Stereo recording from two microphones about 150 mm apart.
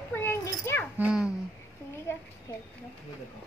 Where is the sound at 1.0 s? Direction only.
5° right (ahead or behind).